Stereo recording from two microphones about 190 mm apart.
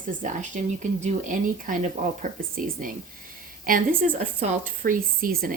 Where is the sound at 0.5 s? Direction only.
40° right (ahead or behind).